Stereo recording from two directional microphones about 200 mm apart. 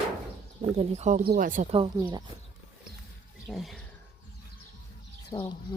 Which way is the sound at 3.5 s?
Centre (ahead or behind).